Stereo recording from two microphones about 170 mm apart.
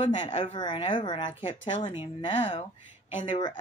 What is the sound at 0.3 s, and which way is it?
Speech, 40° left (ahead or behind).